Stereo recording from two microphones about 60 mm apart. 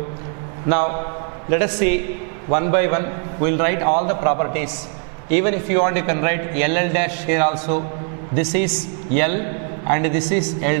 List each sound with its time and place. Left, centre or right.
0.7 s a man's voice: centre